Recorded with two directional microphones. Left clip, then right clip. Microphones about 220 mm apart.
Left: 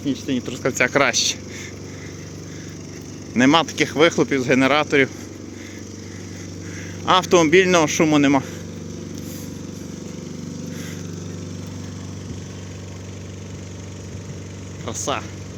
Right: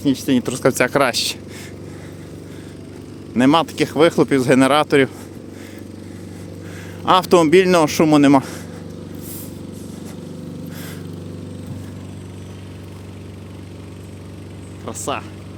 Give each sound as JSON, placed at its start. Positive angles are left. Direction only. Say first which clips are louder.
{"t": 0.0, "sound": "speech", "louder": "right 6 dB", "side_deg": -40}
{"t": 3.3, "sound": "speech", "louder": "right 1 dB", "side_deg": -15}
{"t": 7.0, "sound": "speech", "louder": "right 2 dB", "side_deg": -20}
{"t": 14.8, "sound": "vehicle", "louder": "even", "side_deg": -10}